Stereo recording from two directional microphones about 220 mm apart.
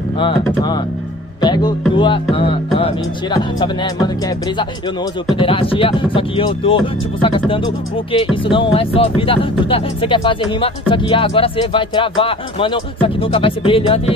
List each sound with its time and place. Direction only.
0.2 s speech: 20° left (ahead or behind)
5.3 s speech: 25° left (ahead or behind)